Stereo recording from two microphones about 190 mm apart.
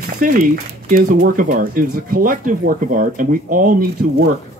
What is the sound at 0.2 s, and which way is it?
Speech, 50° right (ahead or behind).